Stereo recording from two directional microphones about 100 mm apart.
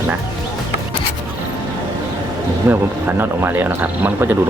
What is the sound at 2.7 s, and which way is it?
Speech, 20° right (ahead or behind).